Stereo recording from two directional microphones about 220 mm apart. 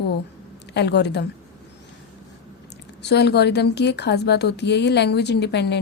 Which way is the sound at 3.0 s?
50° left (ahead or behind).